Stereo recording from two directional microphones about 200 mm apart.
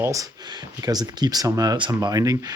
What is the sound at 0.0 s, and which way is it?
Speech, 15° right (ahead or behind).